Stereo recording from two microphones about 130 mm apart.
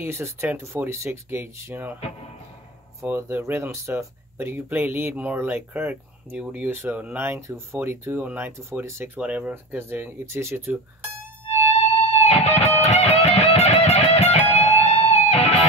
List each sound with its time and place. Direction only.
0.0 s speech: 20° right (ahead or behind)
3.0 s speech: 20° right (ahead or behind)
11.7 s music: 50° left (ahead or behind)